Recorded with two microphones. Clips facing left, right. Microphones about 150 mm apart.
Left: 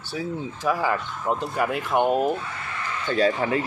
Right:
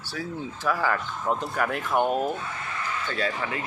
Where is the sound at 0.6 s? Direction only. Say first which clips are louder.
Left 2 dB; 15° left (ahead or behind).